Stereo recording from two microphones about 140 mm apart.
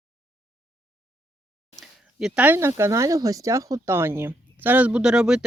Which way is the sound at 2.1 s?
5° right (ahead or behind).